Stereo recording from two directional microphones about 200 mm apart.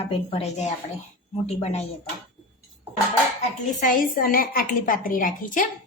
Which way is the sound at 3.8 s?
45° left (ahead or behind).